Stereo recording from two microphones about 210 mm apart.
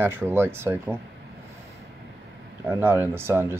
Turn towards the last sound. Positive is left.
turn(degrees=-10)  # may be behind; listen again after turning